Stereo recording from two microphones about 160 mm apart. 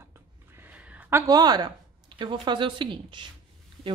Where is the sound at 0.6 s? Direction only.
10° right (ahead or behind).